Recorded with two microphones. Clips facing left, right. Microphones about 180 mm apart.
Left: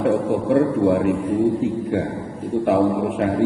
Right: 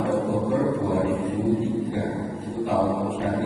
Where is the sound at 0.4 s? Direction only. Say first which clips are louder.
Left 6 dB; 80° left.